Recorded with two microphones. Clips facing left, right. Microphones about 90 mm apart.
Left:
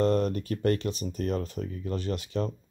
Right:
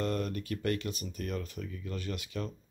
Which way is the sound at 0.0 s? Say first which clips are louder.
Left 8 dB; 35° left (ahead or behind).